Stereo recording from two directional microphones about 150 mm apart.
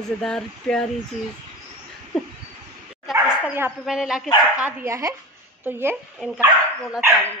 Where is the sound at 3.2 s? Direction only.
10° right (ahead or behind).